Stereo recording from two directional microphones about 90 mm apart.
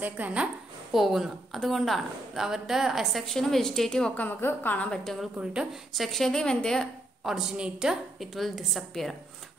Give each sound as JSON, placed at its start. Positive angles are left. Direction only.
{"t": 0.0, "sound": "a woman's voice", "side_deg": -15}
{"t": 0.9, "sound": "a woman's voice", "side_deg": -5}
{"t": 4.3, "sound": "a woman's voice", "side_deg": 25}
{"t": 5.4, "sound": "a woman's voice", "side_deg": -10}
{"t": 7.2, "sound": "a woman's voice", "side_deg": -5}